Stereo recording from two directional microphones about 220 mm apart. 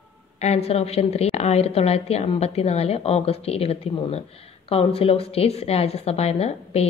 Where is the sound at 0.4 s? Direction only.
30° left (ahead or behind).